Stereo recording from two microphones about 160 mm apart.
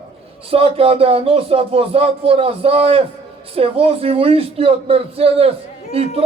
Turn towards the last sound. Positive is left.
turn(degrees=-35)  # may be behind; listen again after turning